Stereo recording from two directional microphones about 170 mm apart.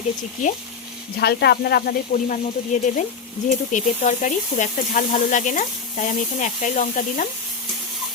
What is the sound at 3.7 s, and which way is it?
Speech, 45° left (ahead or behind).